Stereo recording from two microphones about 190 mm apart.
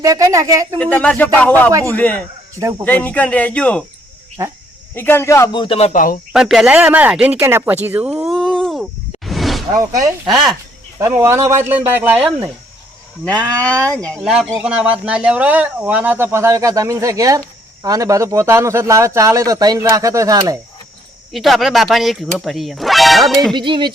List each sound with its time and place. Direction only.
0.0 s speech: 15° right (ahead or behind)
0.8 s speech: 10° left (ahead or behind)
2.6 s speech: 15° right (ahead or behind)
2.8 s speech: 10° left (ahead or behind)
4.4 s speech: 15° right (ahead or behind)
4.9 s a man's voice: 10° left (ahead or behind); by 6.1 s 40° left (ahead or behind)
6.3 s speech: centre (ahead or behind)
8.4 s a sound: centre (ahead or behind)
9.7 s speech: 20° right (ahead or behind)
10.2 s speech: centre (ahead or behind)
11.0 s speech: 15° right (ahead or behind)
13.6 s speech: 5° left (ahead or behind); by 20.6 s 20° right (ahead or behind)
21.3 s speech: centre (ahead or behind)
23.6 s a sound: 25° right (ahead or behind)